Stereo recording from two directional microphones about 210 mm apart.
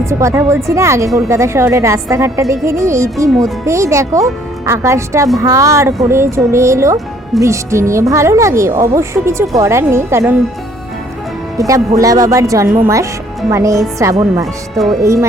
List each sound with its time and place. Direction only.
0.0 s speech: 15° right (ahead or behind)
11.5 s speech: 15° right (ahead or behind)
15.0 s speech: 15° right (ahead or behind)